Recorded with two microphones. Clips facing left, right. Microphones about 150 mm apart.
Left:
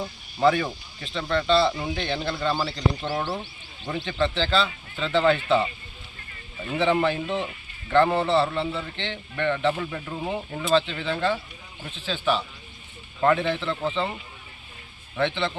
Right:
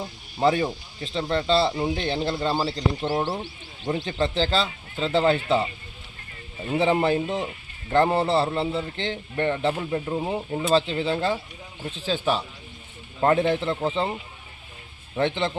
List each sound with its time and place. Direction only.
0.3 s speech: 30° right (ahead or behind)
6.7 s speech: 35° right (ahead or behind)
10.1 s speech: 25° right (ahead or behind)
15.1 s speech: 40° right (ahead or behind)